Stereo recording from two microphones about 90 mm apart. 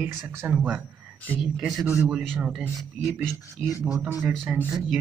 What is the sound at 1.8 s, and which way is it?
Speech, 30° right (ahead or behind).